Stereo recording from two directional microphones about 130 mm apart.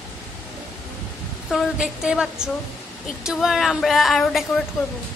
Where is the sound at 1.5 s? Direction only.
5° right (ahead or behind).